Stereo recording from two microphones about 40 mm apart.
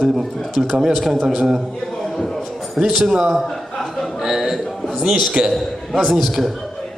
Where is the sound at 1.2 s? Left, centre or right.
Centre.